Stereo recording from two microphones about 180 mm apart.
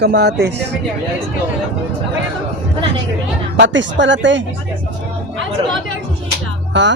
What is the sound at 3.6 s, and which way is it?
Speech, 85° right.